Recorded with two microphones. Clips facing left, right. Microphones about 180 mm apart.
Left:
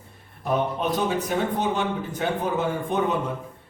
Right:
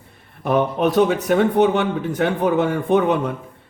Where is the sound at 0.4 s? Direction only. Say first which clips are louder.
Right 6 dB; 65° right (ahead or behind).